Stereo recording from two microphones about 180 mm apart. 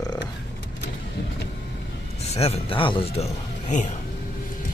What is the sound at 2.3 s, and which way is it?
Speech, 35° left (ahead or behind).